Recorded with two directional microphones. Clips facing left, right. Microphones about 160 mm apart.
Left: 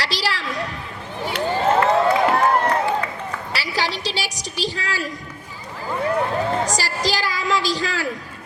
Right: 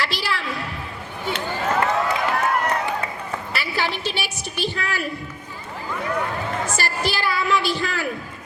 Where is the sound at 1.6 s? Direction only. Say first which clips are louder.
Left 5 dB; 30° left (ahead or behind).